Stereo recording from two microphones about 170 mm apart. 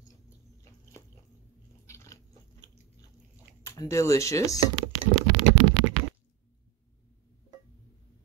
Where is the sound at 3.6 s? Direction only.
15° left (ahead or behind).